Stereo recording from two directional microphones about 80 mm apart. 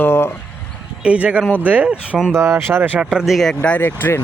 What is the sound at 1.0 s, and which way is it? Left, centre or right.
Speech, centre.